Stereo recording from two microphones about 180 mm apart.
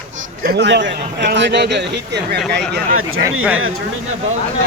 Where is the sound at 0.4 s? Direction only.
70° right (ahead or behind).